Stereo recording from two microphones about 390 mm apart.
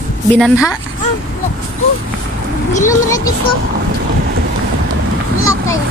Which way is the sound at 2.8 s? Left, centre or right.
Centre.